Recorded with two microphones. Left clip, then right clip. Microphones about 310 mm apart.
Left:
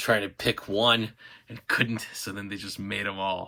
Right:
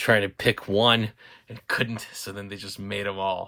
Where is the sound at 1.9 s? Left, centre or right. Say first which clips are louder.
Even; centre.